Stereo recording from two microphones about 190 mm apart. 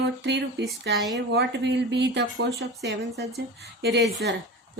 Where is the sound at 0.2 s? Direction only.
70° right (ahead or behind).